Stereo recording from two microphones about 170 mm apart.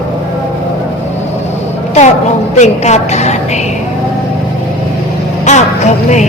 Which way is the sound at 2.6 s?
40° left (ahead or behind).